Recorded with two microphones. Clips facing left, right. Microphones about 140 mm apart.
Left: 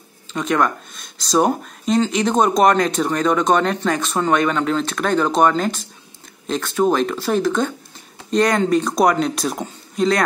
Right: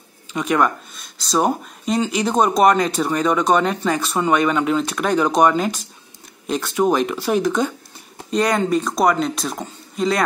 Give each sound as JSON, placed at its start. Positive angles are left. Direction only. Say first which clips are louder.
{"t": 0.3, "sound": "speech", "louder": "even", "side_deg": -10}